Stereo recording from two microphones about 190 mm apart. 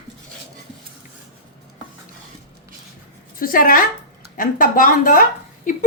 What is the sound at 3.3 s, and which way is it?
A woman's voice, 45° left (ahead or behind).